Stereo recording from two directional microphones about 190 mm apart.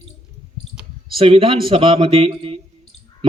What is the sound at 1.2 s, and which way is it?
Speech, 30° right (ahead or behind).